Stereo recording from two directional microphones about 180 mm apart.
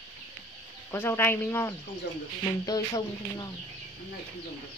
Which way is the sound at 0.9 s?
10° left (ahead or behind).